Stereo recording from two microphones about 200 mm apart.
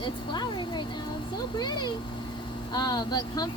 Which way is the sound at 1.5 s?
20° left (ahead or behind).